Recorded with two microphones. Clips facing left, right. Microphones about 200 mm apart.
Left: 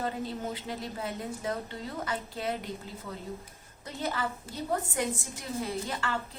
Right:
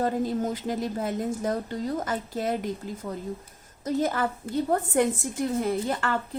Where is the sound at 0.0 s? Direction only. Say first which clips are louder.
Right 8 dB; 45° right (ahead or behind).